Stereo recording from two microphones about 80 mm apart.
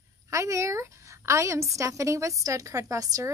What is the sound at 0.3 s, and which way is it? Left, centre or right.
A woman's voice, right.